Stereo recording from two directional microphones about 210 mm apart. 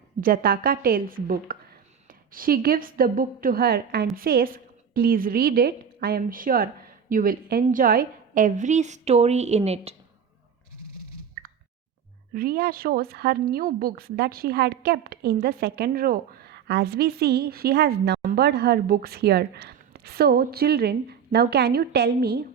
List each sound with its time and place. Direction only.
0.2 s speech: 45° right (ahead or behind)
12.3 s speech: 45° right (ahead or behind)